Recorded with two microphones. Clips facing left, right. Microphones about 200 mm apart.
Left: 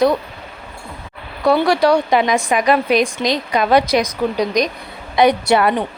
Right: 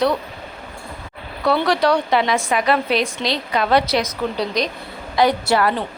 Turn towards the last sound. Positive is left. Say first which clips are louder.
# left 3 dB
turn(degrees=20)  # may be behind; listen again after turning